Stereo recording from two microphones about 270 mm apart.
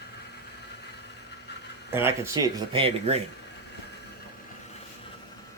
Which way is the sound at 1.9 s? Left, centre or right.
Centre.